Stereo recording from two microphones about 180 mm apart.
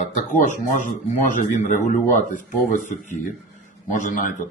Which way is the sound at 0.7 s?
45° left (ahead or behind).